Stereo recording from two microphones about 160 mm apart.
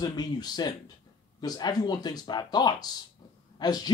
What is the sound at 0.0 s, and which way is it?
Speech, 25° left (ahead or behind).